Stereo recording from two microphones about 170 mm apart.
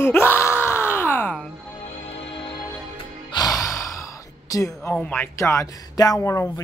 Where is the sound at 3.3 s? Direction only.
20° left (ahead or behind).